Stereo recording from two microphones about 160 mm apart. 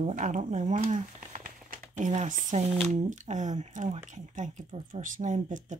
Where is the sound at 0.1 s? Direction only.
50° right (ahead or behind).